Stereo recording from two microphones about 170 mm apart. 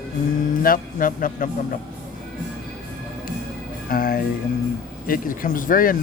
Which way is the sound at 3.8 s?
55° left (ahead or behind).